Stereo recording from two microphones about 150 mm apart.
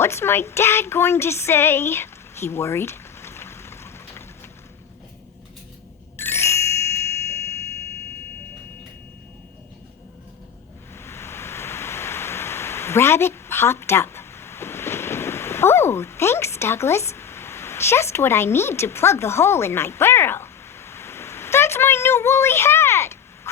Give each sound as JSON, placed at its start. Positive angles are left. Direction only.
{"t": 0.0, "sound": "speech", "side_deg": 15}
{"t": 6.1, "sound": "ding", "side_deg": 15}
{"t": 10.9, "sound": "a sound", "side_deg": 15}